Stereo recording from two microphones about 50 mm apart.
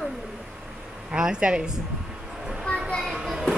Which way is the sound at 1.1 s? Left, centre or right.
Centre.